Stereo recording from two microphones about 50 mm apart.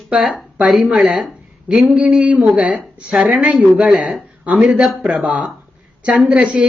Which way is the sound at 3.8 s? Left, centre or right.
Centre.